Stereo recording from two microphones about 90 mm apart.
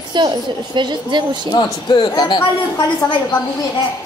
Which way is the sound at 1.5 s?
55° left (ahead or behind).